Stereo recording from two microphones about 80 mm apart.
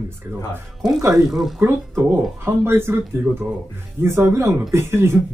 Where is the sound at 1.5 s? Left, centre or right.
Right.